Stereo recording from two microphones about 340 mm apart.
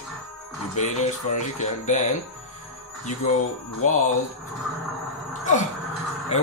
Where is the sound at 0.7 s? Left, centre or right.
Left.